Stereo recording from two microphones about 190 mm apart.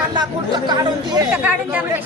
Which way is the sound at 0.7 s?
20° right (ahead or behind).